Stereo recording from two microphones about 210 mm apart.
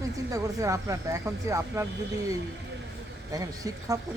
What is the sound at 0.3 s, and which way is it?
Speech, 15° right (ahead or behind).